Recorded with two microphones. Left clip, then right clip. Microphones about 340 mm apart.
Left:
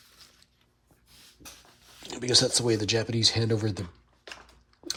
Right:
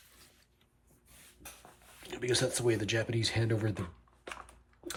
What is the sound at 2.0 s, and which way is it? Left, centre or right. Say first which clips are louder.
Speech: left 8 dB; centre.